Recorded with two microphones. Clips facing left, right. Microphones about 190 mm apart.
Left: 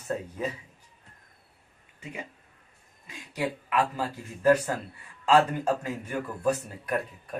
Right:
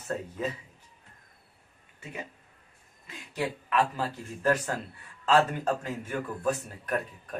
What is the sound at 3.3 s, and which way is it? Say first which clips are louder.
A man's voice: even; 10° left (ahead or behind).